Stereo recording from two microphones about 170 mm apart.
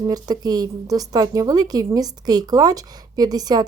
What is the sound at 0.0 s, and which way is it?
A woman's voice, 20° right (ahead or behind).